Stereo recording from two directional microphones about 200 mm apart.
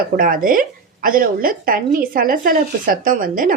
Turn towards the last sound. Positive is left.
turn(degrees=-45)  # may be behind; listen again after turning